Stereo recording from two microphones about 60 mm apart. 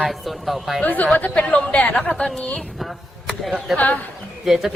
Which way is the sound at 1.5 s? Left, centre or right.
Left.